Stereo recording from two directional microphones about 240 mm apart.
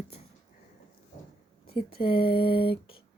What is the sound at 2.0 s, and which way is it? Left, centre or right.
Speech, left.